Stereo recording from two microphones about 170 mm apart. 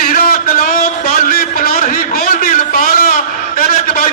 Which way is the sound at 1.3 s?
60° left (ahead or behind).